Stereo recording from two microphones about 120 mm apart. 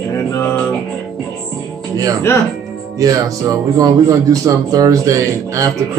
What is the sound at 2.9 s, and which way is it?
Speech, 30° right (ahead or behind).